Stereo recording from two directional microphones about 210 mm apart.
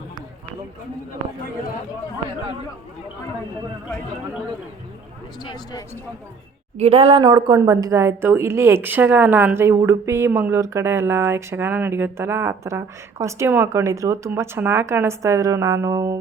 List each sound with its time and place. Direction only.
5.4 s speech: 20° left (ahead or behind)
6.7 s a woman's voice: 30° right (ahead or behind)